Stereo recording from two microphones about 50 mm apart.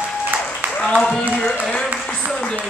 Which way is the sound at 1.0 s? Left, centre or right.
Centre.